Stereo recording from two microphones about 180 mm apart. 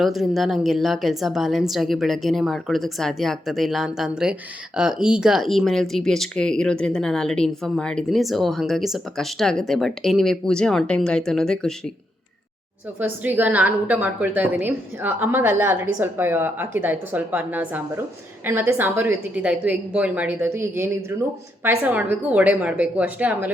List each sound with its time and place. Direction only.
0.0 s speech: centre (ahead or behind)
13.2 s a woman's voice: 10° right (ahead or behind)